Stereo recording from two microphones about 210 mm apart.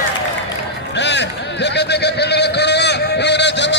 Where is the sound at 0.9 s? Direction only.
55° left (ahead or behind).